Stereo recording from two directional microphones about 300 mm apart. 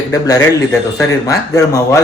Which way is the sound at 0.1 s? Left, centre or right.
Centre.